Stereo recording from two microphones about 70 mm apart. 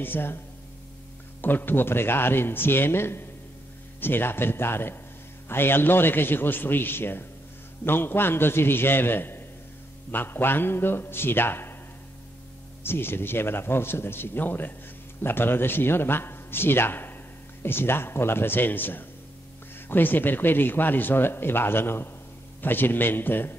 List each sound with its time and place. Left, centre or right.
0.0 s a man's voice: left
1.4 s a man's voice: left
12.8 s a man's voice: left